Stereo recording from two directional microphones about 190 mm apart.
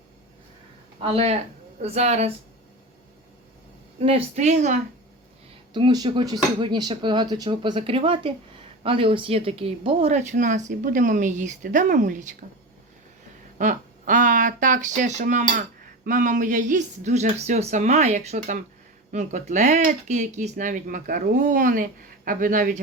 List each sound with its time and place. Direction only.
1.1 s speech: 30° right (ahead or behind)
4.0 s speech: 30° right (ahead or behind)
5.7 s speech: 20° right (ahead or behind); by 12.3 s 45° right (ahead or behind)
13.6 s speech: 40° right (ahead or behind)